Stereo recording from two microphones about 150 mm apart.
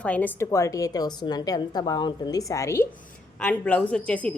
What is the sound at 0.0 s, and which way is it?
A woman's voice, 10° left (ahead or behind).